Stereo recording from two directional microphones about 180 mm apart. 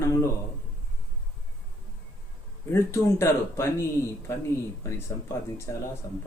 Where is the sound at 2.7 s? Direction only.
15° left (ahead or behind).